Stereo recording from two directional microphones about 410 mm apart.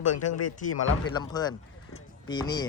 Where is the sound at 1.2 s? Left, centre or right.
Centre.